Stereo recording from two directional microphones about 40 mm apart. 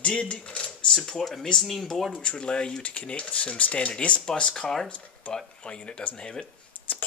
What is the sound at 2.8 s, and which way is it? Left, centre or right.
Speech, left.